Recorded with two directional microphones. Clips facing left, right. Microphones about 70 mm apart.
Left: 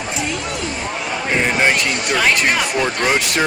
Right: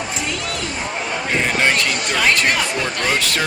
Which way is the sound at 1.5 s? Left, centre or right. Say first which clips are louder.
Left 1 dB; centre.